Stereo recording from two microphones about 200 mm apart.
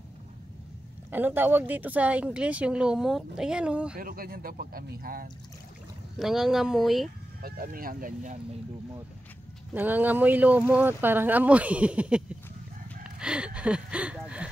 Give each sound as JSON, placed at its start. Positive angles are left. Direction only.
{"t": 1.1, "sound": "speech", "side_deg": -10}
{"t": 4.0, "sound": "speech", "side_deg": -45}
{"t": 6.1, "sound": "speech", "side_deg": 0}
{"t": 7.4, "sound": "speech", "side_deg": -45}
{"t": 9.8, "sound": "speech", "side_deg": -10}
{"t": 13.0, "sound": "a sound", "side_deg": -5}